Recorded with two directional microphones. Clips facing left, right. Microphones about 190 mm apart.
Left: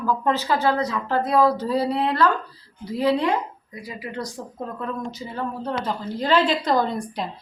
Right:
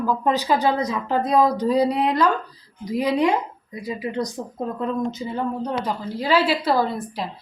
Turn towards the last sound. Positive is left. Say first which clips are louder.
# right 1 dB
turn(degrees=0)  # may be behind; listen again after turning